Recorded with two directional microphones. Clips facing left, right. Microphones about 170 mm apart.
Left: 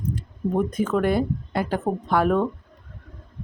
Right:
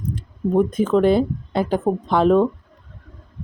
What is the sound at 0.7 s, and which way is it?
Speech, 25° right (ahead or behind).